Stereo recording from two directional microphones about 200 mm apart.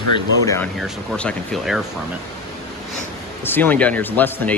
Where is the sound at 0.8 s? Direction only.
Centre (ahead or behind).